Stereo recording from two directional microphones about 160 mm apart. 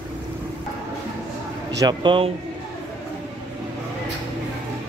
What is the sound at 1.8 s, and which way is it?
Speech, 30° right (ahead or behind).